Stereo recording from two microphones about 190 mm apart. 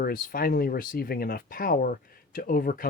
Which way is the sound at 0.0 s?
50° left (ahead or behind).